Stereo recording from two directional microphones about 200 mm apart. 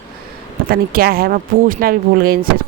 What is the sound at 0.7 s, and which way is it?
Speech, 50° right (ahead or behind).